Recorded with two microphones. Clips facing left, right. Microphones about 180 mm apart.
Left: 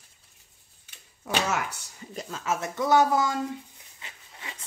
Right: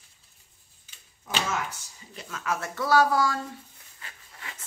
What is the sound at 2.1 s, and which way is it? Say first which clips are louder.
Speech: left 2 dB; 35° left (ahead or behind).